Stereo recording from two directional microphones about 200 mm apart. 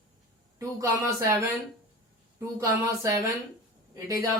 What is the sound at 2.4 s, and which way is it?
A woman's voice, 15° right (ahead or behind).